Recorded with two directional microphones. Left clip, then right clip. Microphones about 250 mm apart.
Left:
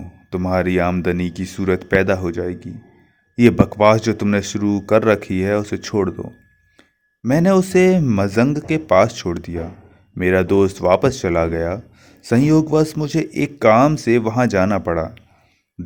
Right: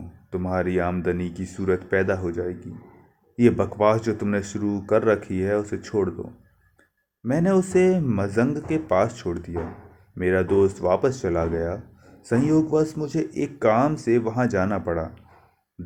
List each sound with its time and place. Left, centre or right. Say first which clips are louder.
0.3 s speech: left 6 dB; left
7.3 s speech: left 6 dB; left